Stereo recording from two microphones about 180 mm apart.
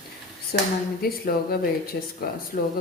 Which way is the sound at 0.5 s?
55° left (ahead or behind).